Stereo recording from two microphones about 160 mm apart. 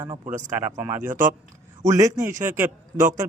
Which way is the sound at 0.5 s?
15° right (ahead or behind).